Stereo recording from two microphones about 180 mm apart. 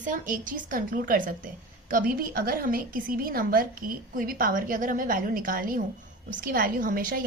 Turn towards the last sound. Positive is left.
turn(degrees=-50)  # may be behind; listen again after turning